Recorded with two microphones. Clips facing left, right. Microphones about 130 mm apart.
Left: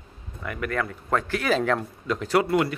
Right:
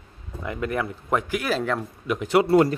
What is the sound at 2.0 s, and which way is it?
Speech, 15° right (ahead or behind).